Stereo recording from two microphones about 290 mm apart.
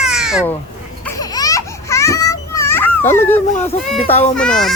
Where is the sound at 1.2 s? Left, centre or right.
Centre.